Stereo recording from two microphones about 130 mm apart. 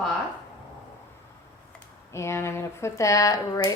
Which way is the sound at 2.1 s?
20° left (ahead or behind).